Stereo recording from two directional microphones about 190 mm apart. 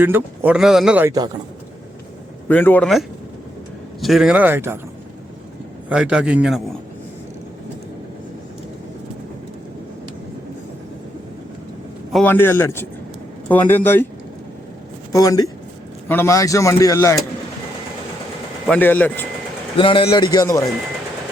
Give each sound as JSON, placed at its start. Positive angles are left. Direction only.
{"t": 0.0, "sound": "speech", "side_deg": -10}
{"t": 2.5, "sound": "a man's voice", "side_deg": 10}
{"t": 4.0, "sound": "speech", "side_deg": 0}
{"t": 5.9, "sound": "speech", "side_deg": -5}
{"t": 12.1, "sound": "a man's voice", "side_deg": 10}
{"t": 15.1, "sound": "a man's voice", "side_deg": 20}
{"t": 18.7, "sound": "a man's voice", "side_deg": 10}
{"t": 19.7, "sound": "a man's voice", "side_deg": 30}